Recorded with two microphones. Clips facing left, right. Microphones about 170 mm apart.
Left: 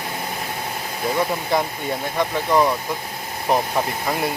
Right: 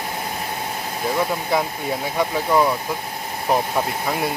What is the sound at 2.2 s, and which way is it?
Speech, 5° right (ahead or behind).